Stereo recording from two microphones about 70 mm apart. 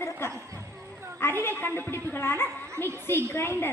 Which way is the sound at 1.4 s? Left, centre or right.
Left.